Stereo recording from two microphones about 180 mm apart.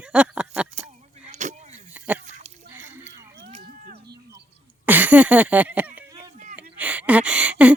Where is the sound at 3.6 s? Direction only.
60° right (ahead or behind).